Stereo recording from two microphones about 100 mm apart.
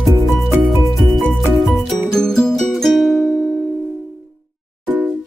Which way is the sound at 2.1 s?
5° left (ahead or behind).